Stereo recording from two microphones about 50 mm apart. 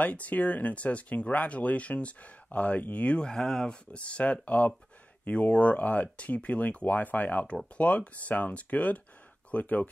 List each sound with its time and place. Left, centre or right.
0.0 s speech: left
3.3 s speech: centre
3.9 s speech: left